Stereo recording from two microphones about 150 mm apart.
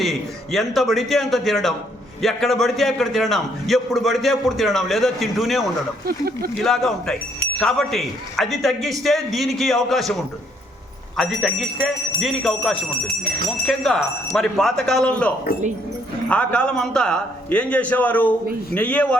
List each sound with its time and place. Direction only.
0.0 s a man's voice: centre (ahead or behind)
6.1 s speech: 90° right
6.6 s a man's voice: centre (ahead or behind)
15.5 s speech: 90° left
16.3 s a man's voice: 10° left (ahead or behind)